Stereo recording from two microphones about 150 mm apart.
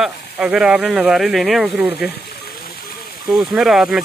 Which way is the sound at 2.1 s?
90° left.